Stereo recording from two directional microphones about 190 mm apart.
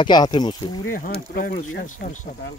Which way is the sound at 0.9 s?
45° left (ahead or behind).